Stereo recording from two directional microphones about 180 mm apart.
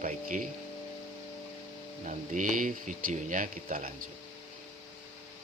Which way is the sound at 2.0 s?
45° right (ahead or behind).